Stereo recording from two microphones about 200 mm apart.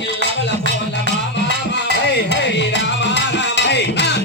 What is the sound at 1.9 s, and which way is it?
Music, 60° left (ahead or behind).